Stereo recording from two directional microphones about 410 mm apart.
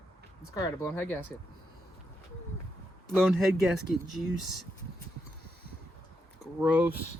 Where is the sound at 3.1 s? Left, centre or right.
Centre.